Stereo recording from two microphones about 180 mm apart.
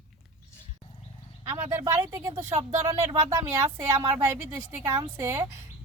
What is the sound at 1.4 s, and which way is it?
Speech, 15° right (ahead or behind).